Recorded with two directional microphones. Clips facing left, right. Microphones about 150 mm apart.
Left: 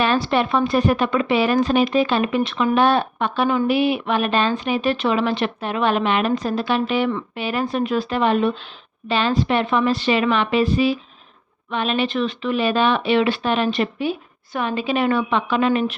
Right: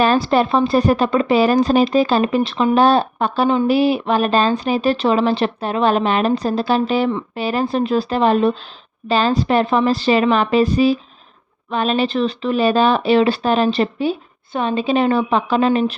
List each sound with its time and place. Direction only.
0.0 s speech: 40° right (ahead or behind)